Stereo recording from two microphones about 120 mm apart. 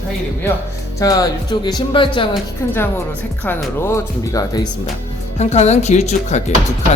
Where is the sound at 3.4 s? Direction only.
20° left (ahead or behind).